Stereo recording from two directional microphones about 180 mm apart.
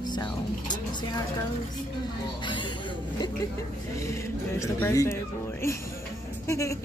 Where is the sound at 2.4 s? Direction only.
25° left (ahead or behind).